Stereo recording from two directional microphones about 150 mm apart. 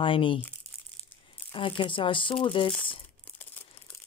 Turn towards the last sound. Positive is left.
turn(degrees=10)  # may be behind; listen again after turning